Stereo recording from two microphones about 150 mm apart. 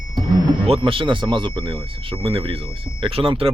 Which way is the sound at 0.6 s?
40° right (ahead or behind).